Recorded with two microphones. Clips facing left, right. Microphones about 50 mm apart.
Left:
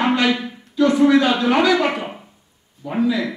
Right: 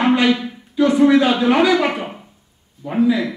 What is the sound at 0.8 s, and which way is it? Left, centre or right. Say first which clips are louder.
A man's voice: right 1 dB; centre.